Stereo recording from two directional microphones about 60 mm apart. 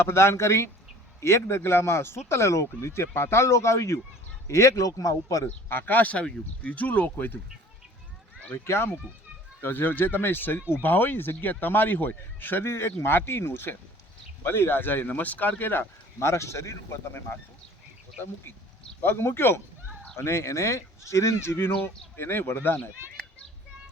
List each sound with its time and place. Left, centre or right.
0.0 s speech: left
5.6 s speech: left
8.5 s speech: left
9.6 s speech: left
16.2 s speech: left
19.0 s speech: left
22.1 s speech: left